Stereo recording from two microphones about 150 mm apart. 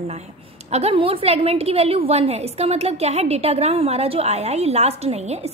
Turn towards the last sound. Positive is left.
turn(degrees=-45)  # may be behind; listen again after turning